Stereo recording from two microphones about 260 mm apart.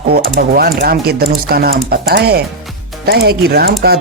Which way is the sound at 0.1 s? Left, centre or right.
Right.